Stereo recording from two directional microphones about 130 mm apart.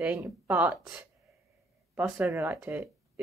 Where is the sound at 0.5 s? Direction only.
15° right (ahead or behind).